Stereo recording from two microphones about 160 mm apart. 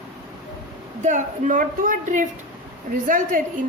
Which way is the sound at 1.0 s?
50° right (ahead or behind).